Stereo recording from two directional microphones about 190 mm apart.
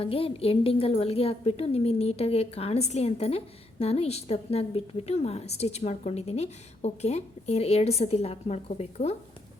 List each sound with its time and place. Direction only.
0.0 s a woman's voice: 30° left (ahead or behind)